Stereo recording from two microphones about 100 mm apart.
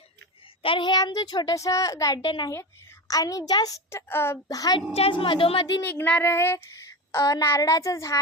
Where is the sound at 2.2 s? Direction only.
50° left (ahead or behind).